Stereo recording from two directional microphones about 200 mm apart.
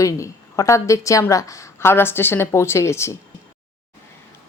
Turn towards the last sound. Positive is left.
turn(degrees=15)  # may be behind; listen again after turning